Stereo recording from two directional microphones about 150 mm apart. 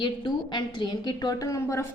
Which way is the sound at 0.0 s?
30° left (ahead or behind).